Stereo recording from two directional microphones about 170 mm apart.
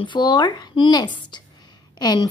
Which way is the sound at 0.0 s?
25° left (ahead or behind).